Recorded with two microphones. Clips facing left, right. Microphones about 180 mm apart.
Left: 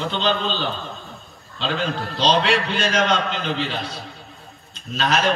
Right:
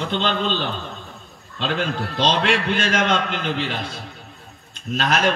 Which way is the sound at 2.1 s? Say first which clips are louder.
Left 1 dB; 50° right (ahead or behind).